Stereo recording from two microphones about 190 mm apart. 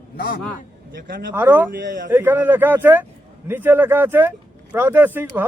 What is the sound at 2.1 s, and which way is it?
A man's voice, 10° right (ahead or behind).